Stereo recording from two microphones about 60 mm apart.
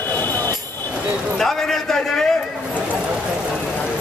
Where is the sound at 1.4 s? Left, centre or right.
Centre.